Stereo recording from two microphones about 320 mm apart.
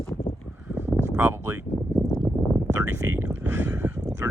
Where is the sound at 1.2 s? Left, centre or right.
Centre.